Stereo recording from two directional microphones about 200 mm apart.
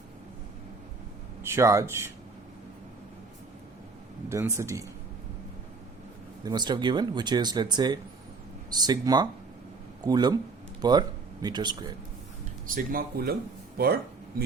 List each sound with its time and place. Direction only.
1.4 s a man's voice: 15° right (ahead or behind)
4.3 s a man's voice: 15° right (ahead or behind)
6.4 s speech: 20° right (ahead or behind)
12.6 s speech: 45° right (ahead or behind)
13.7 s a sound: 50° right (ahead or behind)